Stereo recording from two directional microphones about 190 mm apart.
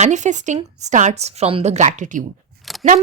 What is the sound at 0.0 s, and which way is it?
A woman's voice, 40° right (ahead or behind).